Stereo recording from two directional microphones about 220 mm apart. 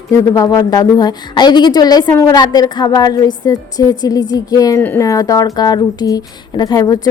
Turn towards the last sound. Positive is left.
turn(degrees=15)  # may be behind; listen again after turning